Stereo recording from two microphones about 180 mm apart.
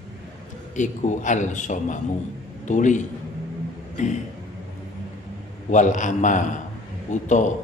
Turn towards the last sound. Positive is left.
turn(degrees=45)  # may be behind; listen again after turning